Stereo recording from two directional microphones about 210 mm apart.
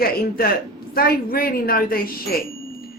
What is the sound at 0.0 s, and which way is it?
A woman's voice, 45° left (ahead or behind).